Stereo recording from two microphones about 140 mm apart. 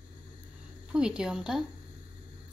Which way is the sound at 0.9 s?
5° right (ahead or behind).